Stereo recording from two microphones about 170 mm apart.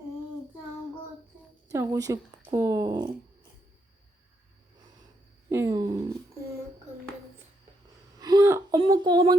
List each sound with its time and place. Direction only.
1.7 s a woman's voice: 20° right (ahead or behind)
5.5 s a woman's voice: 15° right (ahead or behind)
8.2 s a sound: 20° right (ahead or behind)
8.8 s a woman's voice: 25° right (ahead or behind)